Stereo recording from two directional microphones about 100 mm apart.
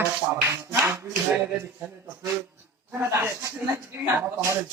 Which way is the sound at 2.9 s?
25° right (ahead or behind).